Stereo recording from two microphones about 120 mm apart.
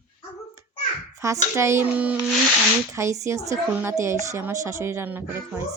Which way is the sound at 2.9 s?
25° right (ahead or behind).